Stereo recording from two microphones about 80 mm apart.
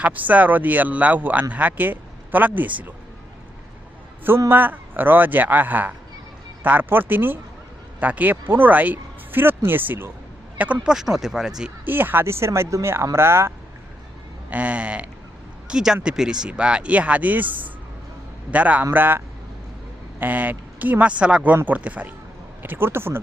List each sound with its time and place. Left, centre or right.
0.0 s speech: right
4.4 s speech: right
10.9 s speech: centre
11.9 s speech: right
14.5 s speech: centre